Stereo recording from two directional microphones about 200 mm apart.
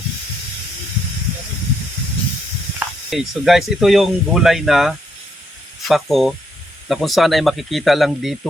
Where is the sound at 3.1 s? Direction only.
Centre (ahead or behind).